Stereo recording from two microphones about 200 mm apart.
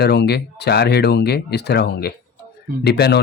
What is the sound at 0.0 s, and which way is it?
Speech, 55° left (ahead or behind).